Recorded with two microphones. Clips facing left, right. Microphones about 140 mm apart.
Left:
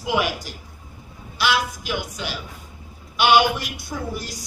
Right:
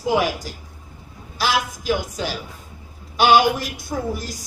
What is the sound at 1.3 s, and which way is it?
Speech, 40° right (ahead or behind).